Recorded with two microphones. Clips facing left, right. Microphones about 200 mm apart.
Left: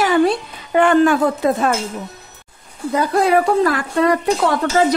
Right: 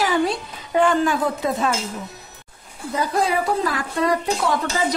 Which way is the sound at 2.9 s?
60° left (ahead or behind).